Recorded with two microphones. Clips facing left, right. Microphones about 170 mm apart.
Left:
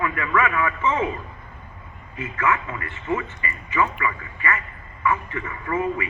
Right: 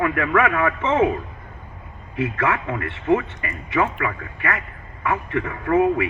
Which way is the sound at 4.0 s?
60° right (ahead or behind).